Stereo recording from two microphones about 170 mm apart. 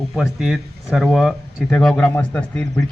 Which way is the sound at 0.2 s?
Centre (ahead or behind).